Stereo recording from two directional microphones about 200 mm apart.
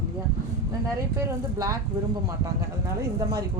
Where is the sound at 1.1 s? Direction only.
15° right (ahead or behind).